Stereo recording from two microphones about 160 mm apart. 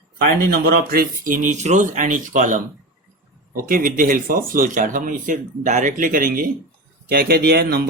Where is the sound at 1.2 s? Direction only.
55° right (ahead or behind).